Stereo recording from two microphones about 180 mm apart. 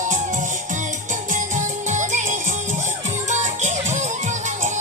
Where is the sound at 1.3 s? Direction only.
40° right (ahead or behind).